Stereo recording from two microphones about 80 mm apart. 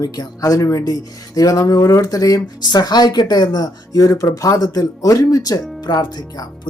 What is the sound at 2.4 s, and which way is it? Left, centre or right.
Speech, left.